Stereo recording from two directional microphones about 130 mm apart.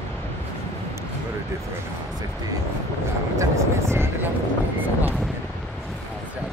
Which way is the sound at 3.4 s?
20° right (ahead or behind).